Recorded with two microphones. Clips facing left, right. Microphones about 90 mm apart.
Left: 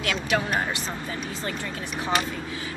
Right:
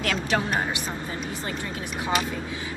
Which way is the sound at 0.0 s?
40° right (ahead or behind).